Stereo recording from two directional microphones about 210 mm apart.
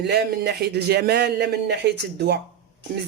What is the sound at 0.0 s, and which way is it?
Speech, 50° right (ahead or behind).